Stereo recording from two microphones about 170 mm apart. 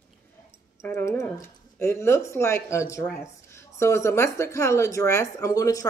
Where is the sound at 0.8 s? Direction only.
15° left (ahead or behind).